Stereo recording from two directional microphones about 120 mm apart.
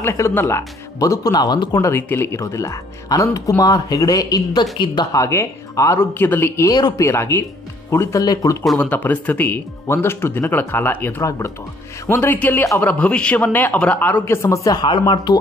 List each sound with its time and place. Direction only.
0.0 s speech: 20° left (ahead or behind)
2.0 s speech: 15° left (ahead or behind)
8.6 s speech: 10° left (ahead or behind); by 15.3 s 40° left (ahead or behind)